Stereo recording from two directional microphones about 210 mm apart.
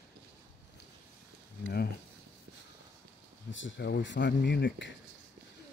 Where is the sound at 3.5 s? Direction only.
65° left (ahead or behind).